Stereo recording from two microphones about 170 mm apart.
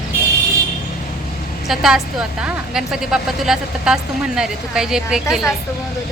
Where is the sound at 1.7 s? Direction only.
Centre (ahead or behind).